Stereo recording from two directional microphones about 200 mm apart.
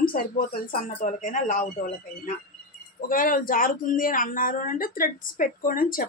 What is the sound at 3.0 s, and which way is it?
Speech, 45° left (ahead or behind).